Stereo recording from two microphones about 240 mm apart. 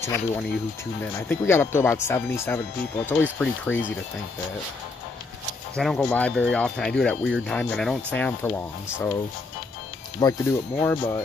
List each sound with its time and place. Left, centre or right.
0.0 s speech: centre
5.8 s speech: centre
10.2 s speech: centre